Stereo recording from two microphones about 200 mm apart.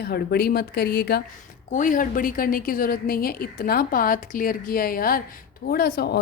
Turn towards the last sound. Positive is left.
turn(degrees=50)  # may be behind; listen again after turning